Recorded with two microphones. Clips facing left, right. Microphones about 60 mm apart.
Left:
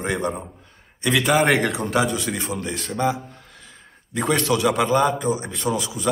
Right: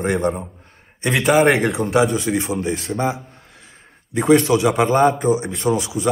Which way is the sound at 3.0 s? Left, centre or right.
Right.